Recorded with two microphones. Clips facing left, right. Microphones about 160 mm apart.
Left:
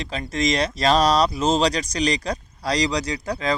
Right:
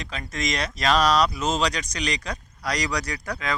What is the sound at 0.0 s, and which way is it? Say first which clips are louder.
Speech: left 6 dB; 30° left (ahead or behind).